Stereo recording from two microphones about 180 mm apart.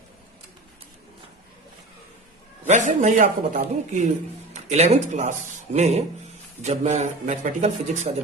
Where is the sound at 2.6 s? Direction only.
45° right (ahead or behind).